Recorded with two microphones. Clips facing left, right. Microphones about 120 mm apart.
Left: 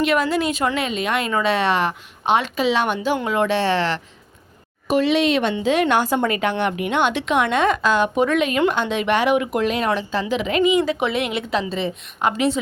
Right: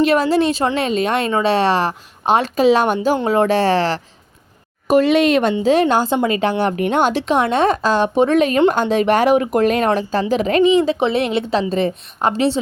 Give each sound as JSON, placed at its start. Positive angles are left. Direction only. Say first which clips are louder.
{"t": 0.0, "sound": "a woman's voice", "louder": "right 5 dB", "side_deg": -35}
{"t": 5.6, "sound": "a woman's voice", "louder": "right 2 dB", "side_deg": -35}
{"t": 11.7, "sound": "speech", "louder": "right 6 dB", "side_deg": -45}
{"t": 12.3, "sound": "a woman's voice", "louder": "right 3 dB", "side_deg": -30}